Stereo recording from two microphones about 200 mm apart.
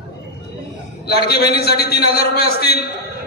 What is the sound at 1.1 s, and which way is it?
A man's voice, 50° left (ahead or behind).